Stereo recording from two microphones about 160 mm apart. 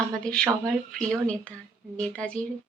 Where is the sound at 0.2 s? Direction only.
5° left (ahead or behind).